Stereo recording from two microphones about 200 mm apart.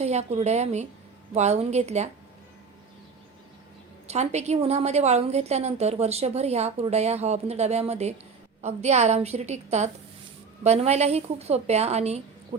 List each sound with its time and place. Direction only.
0.0 s a woman's voice: 35° right (ahead or behind)
4.0 s a woman's voice: 35° right (ahead or behind)